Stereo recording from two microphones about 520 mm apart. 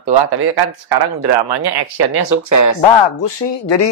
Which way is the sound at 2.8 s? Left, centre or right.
Left.